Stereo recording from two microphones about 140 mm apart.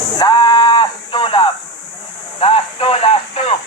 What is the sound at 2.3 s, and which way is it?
Speech, 40° left (ahead or behind).